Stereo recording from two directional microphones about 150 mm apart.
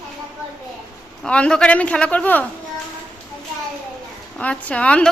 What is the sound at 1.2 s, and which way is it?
A man's voice, 5° left (ahead or behind).